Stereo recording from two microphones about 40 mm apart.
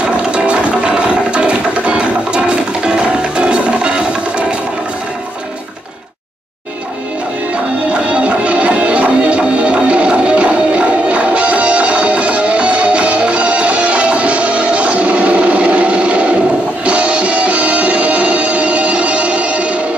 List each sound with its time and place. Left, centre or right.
0.0 s music: right
7.9 s music: right